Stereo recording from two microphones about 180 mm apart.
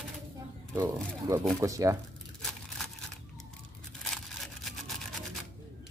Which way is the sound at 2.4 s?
Centre (ahead or behind).